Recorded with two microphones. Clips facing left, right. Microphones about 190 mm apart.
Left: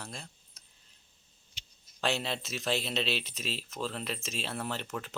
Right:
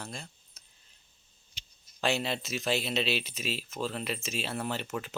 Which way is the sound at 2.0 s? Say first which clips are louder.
Right 2 dB; centre (ahead or behind).